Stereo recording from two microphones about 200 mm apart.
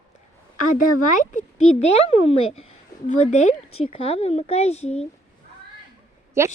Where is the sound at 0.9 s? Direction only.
40° left (ahead or behind).